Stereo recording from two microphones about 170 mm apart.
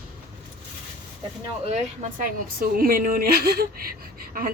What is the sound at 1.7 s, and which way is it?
A woman's voice, 50° right (ahead or behind).